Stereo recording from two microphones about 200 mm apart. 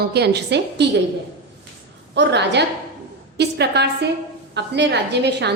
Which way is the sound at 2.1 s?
60° right (ahead or behind).